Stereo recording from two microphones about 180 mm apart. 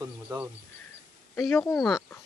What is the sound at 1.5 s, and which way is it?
Speech, 20° left (ahead or behind).